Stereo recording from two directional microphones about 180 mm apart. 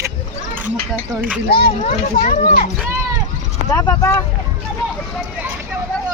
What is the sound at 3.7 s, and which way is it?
Speech, 15° left (ahead or behind).